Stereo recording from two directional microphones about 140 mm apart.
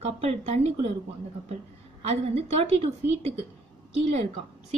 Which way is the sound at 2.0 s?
45° right (ahead or behind).